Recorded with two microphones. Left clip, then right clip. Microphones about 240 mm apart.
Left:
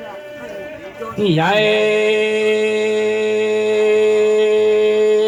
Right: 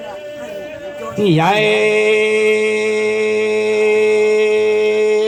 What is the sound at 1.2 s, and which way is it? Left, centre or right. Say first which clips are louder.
Mantra: right 1 dB; right.